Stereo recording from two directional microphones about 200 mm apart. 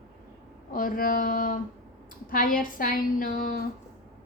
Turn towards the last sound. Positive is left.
turn(degrees=45)  # may be behind; listen again after turning